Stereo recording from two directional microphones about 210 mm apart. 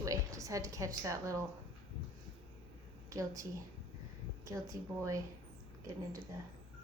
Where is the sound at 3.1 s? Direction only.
15° right (ahead or behind).